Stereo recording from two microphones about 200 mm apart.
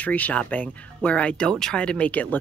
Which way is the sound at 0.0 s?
5° left (ahead or behind).